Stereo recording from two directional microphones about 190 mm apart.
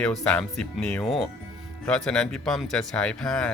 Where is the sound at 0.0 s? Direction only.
5° left (ahead or behind).